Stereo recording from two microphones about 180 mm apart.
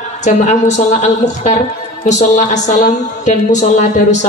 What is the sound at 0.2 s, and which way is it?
A woman's voice, 40° left (ahead or behind).